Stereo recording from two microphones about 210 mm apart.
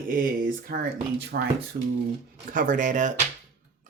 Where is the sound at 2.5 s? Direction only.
40° right (ahead or behind).